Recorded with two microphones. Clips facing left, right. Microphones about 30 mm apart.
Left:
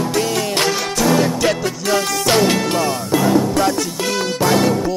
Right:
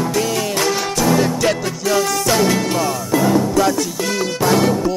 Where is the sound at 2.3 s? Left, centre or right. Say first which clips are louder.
Left 2 dB; left.